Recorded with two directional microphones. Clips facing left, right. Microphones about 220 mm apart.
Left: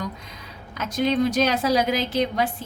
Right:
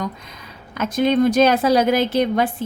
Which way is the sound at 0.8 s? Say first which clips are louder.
Right 5 dB; 50° right (ahead or behind).